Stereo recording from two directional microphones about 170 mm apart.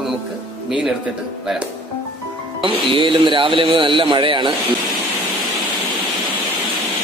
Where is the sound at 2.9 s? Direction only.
30° right (ahead or behind).